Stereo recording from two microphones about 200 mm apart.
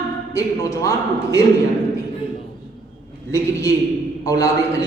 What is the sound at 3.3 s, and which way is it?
A man's voice, 15° left (ahead or behind).